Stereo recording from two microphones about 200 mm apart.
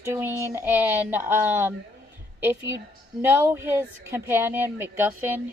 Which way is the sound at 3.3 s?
15° right (ahead or behind).